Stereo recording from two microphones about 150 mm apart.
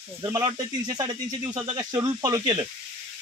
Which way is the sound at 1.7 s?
25° right (ahead or behind).